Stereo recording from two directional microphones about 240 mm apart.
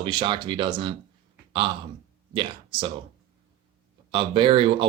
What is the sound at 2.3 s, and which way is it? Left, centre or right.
Speech, right.